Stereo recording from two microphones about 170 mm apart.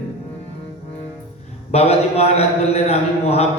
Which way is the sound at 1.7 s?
35° left (ahead or behind).